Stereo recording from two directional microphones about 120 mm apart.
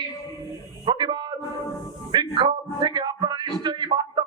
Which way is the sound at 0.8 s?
40° right (ahead or behind).